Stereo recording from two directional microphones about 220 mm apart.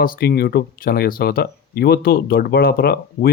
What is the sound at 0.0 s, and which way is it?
Speech, 45° left (ahead or behind).